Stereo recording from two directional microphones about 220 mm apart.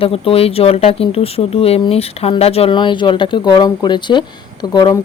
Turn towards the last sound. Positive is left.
turn(degrees=20)  # may be behind; listen again after turning